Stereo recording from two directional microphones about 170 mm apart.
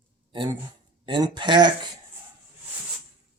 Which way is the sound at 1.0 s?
30° right (ahead or behind).